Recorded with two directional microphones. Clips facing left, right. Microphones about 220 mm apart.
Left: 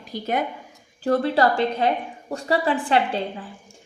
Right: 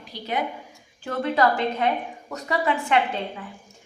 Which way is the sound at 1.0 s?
35° left (ahead or behind).